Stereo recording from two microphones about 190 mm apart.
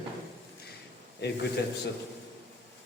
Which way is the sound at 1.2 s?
60° left (ahead or behind).